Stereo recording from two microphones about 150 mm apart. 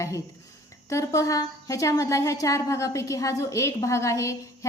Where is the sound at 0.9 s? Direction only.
20° left (ahead or behind).